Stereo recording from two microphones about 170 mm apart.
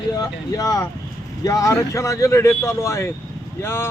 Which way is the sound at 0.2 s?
20° left (ahead or behind).